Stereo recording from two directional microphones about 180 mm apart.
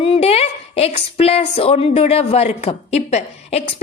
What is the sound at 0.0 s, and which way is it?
A woman's voice, 30° left (ahead or behind).